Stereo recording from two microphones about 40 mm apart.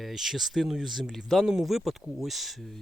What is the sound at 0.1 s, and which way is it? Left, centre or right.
Speech, centre.